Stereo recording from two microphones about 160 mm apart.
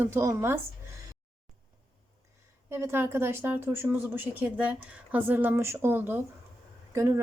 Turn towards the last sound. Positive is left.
turn(degrees=-20)  # may be behind; listen again after turning